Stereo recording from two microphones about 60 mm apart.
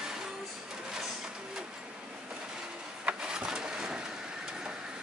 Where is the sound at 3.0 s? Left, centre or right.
Centre.